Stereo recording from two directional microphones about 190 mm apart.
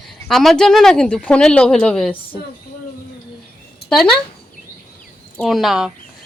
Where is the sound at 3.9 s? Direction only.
5° left (ahead or behind).